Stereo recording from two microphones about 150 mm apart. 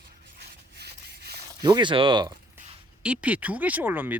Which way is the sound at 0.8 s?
90° right.